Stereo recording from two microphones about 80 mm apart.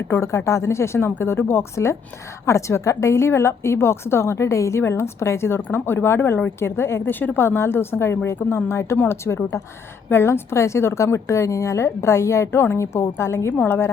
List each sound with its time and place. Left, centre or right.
0.1 s a woman's voice: left